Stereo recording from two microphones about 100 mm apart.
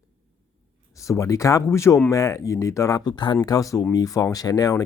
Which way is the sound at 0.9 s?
30° left (ahead or behind).